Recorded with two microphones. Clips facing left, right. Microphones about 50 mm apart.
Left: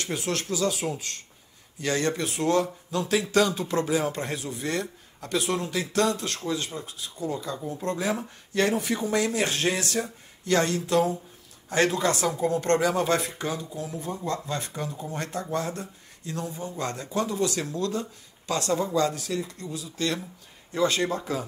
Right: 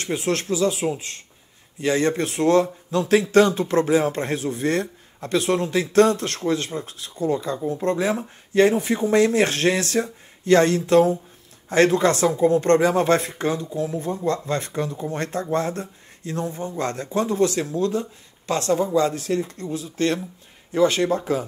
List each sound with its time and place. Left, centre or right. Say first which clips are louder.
0.2 s speech: right 6 dB; right